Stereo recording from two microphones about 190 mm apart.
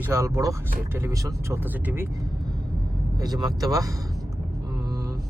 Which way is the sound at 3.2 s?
20° right (ahead or behind).